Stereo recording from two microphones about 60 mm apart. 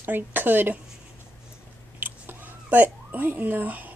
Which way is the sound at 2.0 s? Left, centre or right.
Right.